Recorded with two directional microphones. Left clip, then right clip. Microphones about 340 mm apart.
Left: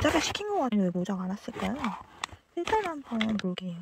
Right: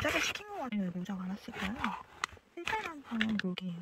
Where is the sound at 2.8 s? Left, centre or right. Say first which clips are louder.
Left 5 dB; left.